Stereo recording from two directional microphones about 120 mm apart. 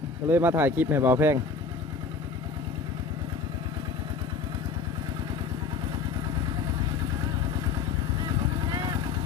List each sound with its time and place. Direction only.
0.3 s speech: 15° right (ahead or behind)
8.7 s vehicle: 30° right (ahead or behind)